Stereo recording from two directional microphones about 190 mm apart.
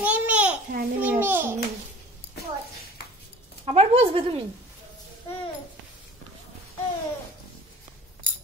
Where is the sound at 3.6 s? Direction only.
30° right (ahead or behind).